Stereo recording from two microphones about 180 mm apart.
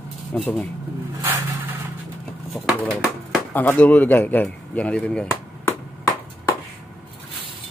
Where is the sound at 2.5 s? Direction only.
5° left (ahead or behind).